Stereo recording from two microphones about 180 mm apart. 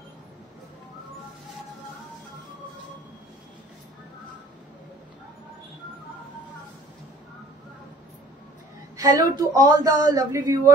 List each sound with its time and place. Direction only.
8.9 s speech: 20° right (ahead or behind)